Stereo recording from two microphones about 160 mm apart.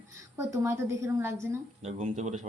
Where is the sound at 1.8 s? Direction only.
45° right (ahead or behind).